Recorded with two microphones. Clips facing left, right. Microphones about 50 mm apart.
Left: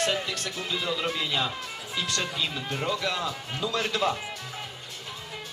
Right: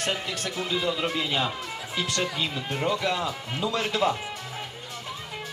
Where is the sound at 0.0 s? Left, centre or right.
Right.